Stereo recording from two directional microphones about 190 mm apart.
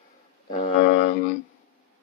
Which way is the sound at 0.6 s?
40° left (ahead or behind).